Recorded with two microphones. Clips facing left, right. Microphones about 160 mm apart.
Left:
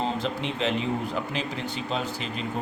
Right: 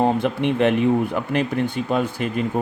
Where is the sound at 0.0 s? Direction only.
55° right (ahead or behind).